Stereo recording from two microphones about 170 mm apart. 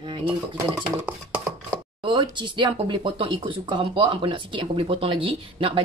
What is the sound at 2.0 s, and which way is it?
Speech, 25° right (ahead or behind).